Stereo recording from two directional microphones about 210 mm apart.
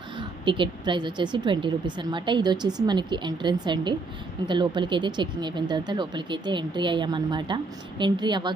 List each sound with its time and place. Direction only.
0.2 s speech: 25° right (ahead or behind)